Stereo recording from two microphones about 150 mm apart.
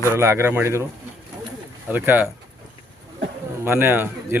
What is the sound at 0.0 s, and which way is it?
Speech, 15° right (ahead or behind).